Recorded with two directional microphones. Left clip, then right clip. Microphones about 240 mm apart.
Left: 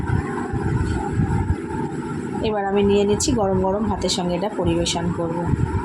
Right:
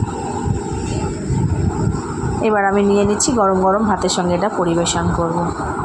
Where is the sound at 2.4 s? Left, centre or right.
Right.